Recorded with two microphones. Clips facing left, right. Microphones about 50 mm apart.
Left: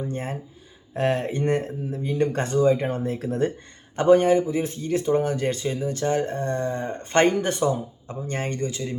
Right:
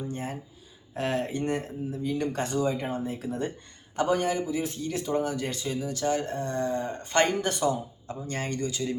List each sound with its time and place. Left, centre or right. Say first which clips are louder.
0.0 s a sound: left 4 dB; left
0.9 s a man's voice: left 5 dB; left
2.9 s a man's voice: left 5 dB; left